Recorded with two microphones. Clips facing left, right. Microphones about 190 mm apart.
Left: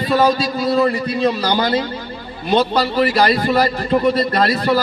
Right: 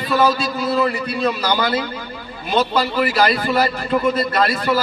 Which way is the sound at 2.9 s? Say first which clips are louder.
Left 3 dB; 40° left (ahead or behind).